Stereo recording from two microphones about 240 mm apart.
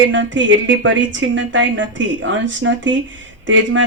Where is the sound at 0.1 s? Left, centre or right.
Right.